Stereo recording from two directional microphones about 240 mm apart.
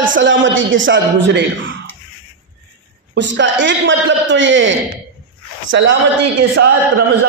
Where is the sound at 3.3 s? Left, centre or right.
Right.